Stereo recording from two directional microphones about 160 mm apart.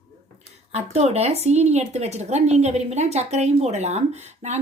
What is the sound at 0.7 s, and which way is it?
Speech, 40° right (ahead or behind).